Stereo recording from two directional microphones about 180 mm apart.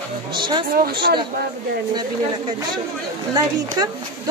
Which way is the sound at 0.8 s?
60° right (ahead or behind).